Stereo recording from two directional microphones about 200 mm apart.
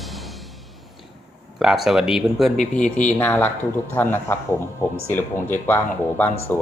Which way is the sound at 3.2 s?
10° left (ahead or behind).